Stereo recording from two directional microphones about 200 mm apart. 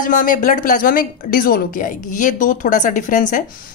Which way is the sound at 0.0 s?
40° left (ahead or behind).